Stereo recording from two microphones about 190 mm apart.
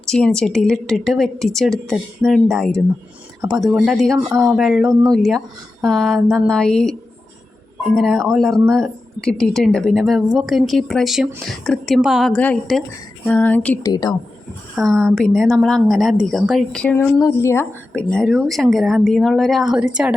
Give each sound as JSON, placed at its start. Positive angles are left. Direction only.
{"t": 0.1, "sound": "speech", "side_deg": 5}
{"t": 7.9, "sound": "speech", "side_deg": 0}
{"t": 13.8, "sound": "a woman's voice", "side_deg": 20}
{"t": 14.8, "sound": "speech", "side_deg": 0}